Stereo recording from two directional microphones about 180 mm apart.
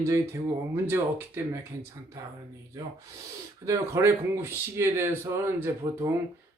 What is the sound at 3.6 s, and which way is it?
Speech, 15° right (ahead or behind).